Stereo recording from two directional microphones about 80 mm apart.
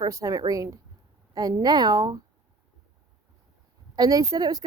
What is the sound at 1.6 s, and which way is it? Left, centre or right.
Speech, right.